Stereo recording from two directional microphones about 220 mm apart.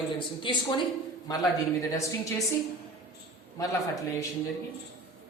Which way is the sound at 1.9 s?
15° left (ahead or behind).